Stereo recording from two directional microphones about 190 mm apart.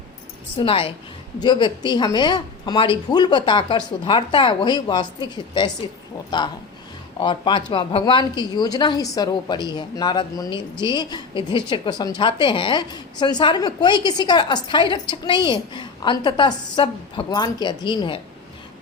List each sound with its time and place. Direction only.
0.6 s a woman's voice: 30° left (ahead or behind)
7.2 s a woman's voice: 25° left (ahead or behind)